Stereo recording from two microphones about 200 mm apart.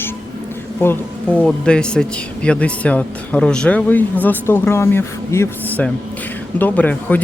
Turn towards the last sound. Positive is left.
turn(degrees=10)  # may be behind; listen again after turning